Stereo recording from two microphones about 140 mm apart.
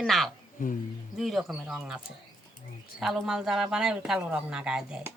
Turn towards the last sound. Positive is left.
turn(degrees=-5)  # may be behind; listen again after turning